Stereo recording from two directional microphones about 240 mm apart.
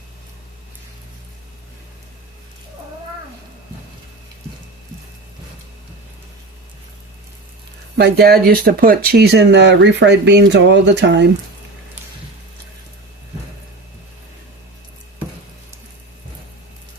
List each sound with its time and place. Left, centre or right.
7.9 s speech: right